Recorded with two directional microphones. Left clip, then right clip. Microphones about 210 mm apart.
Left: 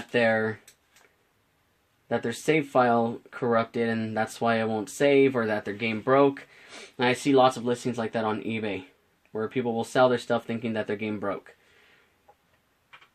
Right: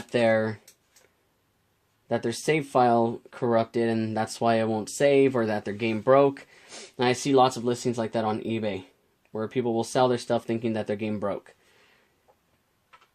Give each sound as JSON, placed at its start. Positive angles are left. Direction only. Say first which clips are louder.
{"t": 0.1, "sound": "speech", "louder": "right 1 dB", "side_deg": -40}
{"t": 2.0, "sound": "speech", "louder": "even", "side_deg": -40}